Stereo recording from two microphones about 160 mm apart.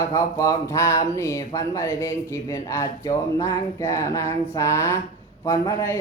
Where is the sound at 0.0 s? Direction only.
20° left (ahead or behind).